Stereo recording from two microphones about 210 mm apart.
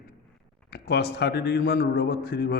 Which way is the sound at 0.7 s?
50° left (ahead or behind).